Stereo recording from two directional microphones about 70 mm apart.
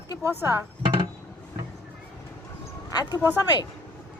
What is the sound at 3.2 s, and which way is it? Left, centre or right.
Speech, right.